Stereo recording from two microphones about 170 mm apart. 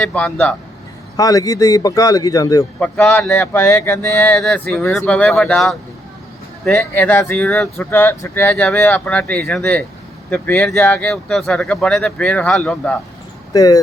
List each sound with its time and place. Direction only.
0.0 s speech: 5° left (ahead or behind)
1.1 s speech: 20° left (ahead or behind)
2.8 s speech: 10° left (ahead or behind)
4.4 s speech: 5° left (ahead or behind)
6.7 s speech: 10° left (ahead or behind)
13.5 s speech: 20° left (ahead or behind)